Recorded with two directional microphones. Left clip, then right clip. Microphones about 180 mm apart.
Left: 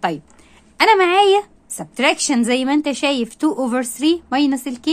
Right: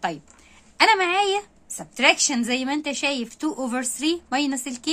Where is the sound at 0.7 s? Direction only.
20° left (ahead or behind).